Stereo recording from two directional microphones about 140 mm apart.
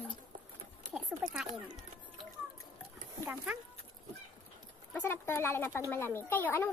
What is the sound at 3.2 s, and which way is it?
Speech, 10° right (ahead or behind).